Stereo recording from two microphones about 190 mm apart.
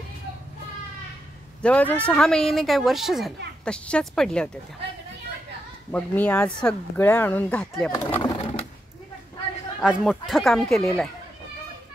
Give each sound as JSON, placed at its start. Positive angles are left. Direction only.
{"t": 1.6, "sound": "speech", "side_deg": 5}
{"t": 5.9, "sound": "speech", "side_deg": 10}
{"t": 7.9, "sound": "speech", "side_deg": 20}
{"t": 9.8, "sound": "speech", "side_deg": 0}